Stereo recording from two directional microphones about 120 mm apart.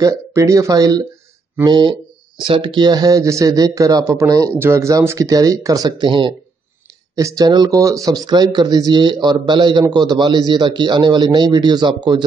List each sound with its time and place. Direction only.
0.0 s speech: 25° right (ahead or behind); by 6.3 s 40° right (ahead or behind)
7.2 s speech: 30° right (ahead or behind)